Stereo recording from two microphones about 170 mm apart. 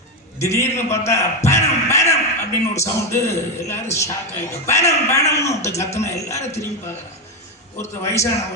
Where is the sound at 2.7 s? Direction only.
15° left (ahead or behind).